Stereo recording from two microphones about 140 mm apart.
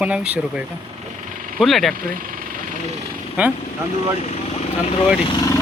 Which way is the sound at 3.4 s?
10° right (ahead or behind).